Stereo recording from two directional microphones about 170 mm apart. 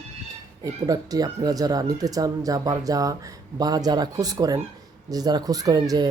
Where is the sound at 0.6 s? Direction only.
20° right (ahead or behind).